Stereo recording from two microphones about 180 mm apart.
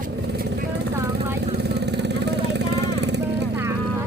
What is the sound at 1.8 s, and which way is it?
Vehicle, 70° right (ahead or behind).